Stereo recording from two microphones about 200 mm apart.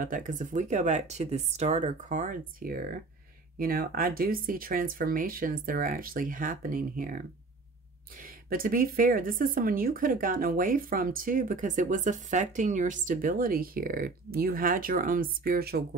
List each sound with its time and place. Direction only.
0.0 s speech: 40° right (ahead or behind)
8.2 s speech: 45° right (ahead or behind)